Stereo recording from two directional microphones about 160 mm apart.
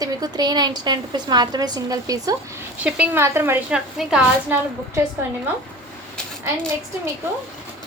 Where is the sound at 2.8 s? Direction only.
10° right (ahead or behind).